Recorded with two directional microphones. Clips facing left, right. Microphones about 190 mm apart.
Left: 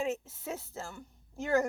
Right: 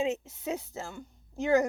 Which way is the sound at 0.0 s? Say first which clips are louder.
Right 4 dB; 15° right (ahead or behind).